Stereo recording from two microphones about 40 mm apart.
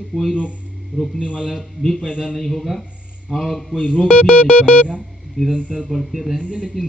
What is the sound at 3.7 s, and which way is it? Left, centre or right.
Speech, left.